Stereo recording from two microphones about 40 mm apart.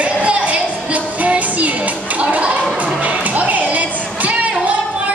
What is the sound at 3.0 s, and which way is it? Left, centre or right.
Music, right.